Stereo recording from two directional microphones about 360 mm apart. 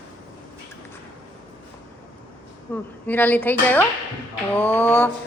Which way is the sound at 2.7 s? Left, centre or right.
Centre.